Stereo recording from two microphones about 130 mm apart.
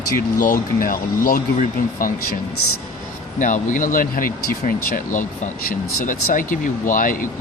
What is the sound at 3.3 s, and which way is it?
Speech, 80° left.